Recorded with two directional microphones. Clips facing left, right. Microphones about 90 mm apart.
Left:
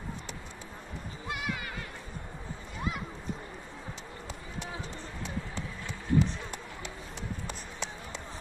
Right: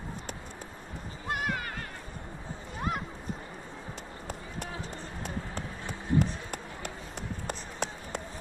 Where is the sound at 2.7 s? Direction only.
45° right (ahead or behind).